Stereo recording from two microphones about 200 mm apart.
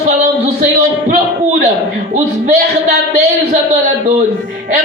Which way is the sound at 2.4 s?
40° right (ahead or behind).